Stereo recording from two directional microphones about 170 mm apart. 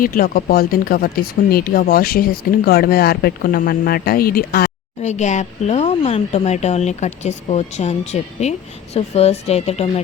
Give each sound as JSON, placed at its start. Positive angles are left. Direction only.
{"t": 0.0, "sound": "speech", "side_deg": 55}
{"t": 5.0, "sound": "speech", "side_deg": 45}